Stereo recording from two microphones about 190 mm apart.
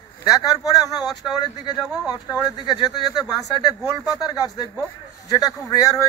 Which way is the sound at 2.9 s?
20° left (ahead or behind).